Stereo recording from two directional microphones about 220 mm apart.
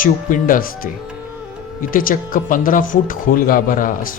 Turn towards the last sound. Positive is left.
turn(degrees=40)  # may be behind; listen again after turning